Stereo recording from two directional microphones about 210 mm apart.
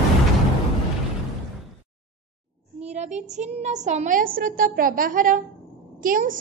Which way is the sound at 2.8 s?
30° right (ahead or behind).